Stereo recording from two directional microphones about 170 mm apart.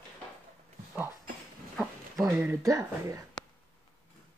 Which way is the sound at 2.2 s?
20° right (ahead or behind).